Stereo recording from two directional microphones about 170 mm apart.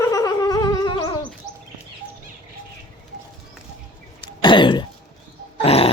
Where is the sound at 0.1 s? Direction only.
20° left (ahead or behind).